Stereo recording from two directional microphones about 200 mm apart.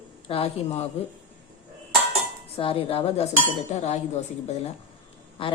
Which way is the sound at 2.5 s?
30° left (ahead or behind).